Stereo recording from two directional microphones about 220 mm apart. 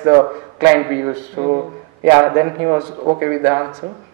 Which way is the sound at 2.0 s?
15° right (ahead or behind).